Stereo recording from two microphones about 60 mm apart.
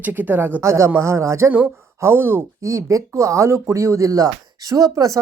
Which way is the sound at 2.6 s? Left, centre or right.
Right.